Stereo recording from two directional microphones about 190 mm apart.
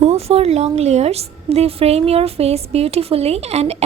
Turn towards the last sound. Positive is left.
turn(degrees=-35)  # may be behind; listen again after turning